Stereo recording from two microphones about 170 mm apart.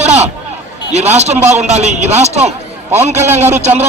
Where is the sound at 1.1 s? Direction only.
40° right (ahead or behind).